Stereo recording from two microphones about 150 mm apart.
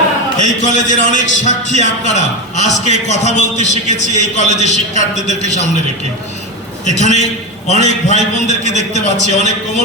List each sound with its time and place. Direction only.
0.3 s a man's voice: 55° left (ahead or behind)
6.8 s a man's voice: 50° left (ahead or behind)